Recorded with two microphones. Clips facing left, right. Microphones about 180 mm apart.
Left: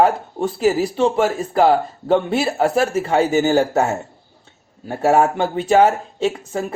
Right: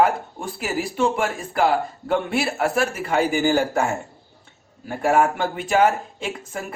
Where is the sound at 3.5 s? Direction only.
40° left (ahead or behind).